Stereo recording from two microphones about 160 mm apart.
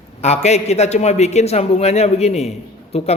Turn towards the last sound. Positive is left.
turn(degrees=40)  # may be behind; listen again after turning